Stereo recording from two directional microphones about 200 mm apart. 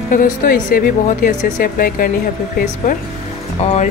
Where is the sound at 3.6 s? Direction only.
30° left (ahead or behind).